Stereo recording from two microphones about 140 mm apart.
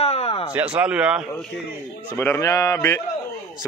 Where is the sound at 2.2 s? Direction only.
20° left (ahead or behind).